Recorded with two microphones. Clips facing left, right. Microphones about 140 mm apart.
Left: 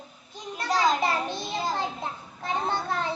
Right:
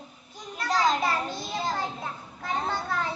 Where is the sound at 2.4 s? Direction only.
25° left (ahead or behind).